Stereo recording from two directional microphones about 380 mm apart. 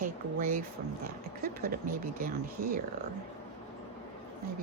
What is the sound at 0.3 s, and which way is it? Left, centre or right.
Speech, right.